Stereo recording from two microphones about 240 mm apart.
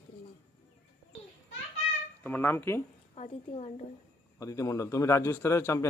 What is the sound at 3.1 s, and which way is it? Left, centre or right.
Speech, left.